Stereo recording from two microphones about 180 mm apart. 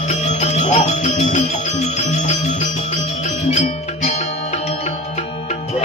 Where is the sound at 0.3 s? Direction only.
40° left (ahead or behind).